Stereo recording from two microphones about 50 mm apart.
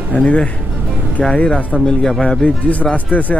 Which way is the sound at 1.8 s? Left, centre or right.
Centre.